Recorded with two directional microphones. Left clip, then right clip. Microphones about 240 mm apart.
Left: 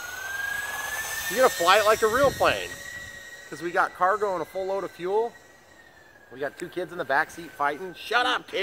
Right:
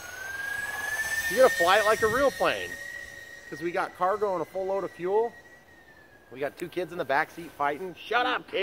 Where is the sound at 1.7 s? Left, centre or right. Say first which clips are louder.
Left 3 dB; left.